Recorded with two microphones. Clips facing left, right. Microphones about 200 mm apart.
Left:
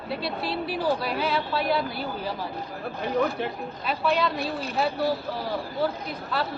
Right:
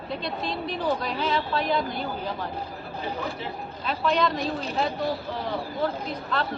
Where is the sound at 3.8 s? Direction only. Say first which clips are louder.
Right 1 dB; 5° left (ahead or behind).